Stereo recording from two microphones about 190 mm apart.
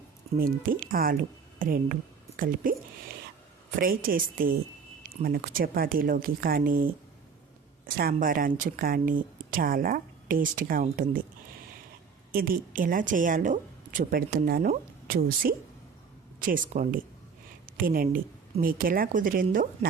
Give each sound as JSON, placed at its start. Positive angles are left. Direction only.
{"t": 0.3, "sound": "speech", "side_deg": -50}
{"t": 3.8, "sound": "speech", "side_deg": -50}
{"t": 12.3, "sound": "a woman's voice", "side_deg": -50}